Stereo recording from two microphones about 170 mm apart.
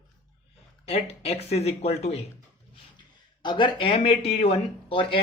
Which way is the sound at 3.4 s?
25° left (ahead or behind).